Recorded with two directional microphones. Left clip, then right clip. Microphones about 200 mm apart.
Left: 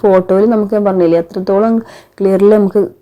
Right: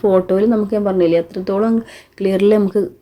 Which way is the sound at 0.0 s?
15° left (ahead or behind).